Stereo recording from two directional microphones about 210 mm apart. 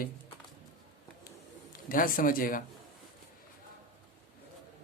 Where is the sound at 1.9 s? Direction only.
40° left (ahead or behind).